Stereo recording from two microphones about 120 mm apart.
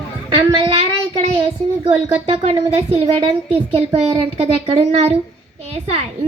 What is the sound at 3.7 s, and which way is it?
A woman's voice, 60° right (ahead or behind).